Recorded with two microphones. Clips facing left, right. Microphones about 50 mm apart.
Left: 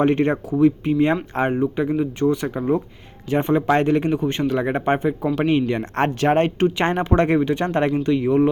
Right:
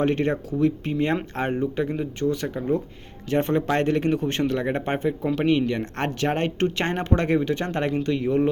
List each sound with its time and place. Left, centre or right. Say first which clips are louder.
0.0 s speech: left 4 dB; left
1.4 s speech: left 4 dB; centre
2.2 s speech: left 3 dB; left
3.2 s speech: left 4 dB; centre
7.3 s speech: left 4 dB; centre